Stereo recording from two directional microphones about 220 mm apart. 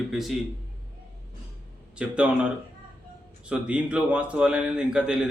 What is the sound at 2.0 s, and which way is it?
A man's voice, 5° right (ahead or behind).